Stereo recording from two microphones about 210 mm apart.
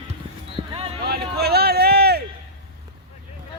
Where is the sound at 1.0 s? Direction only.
50° right (ahead or behind).